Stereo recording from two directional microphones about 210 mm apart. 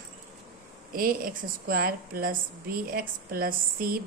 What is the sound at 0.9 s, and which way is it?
A woman's voice, 40° right (ahead or behind).